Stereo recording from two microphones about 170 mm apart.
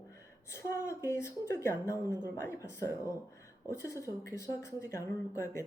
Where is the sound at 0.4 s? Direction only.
15° left (ahead or behind).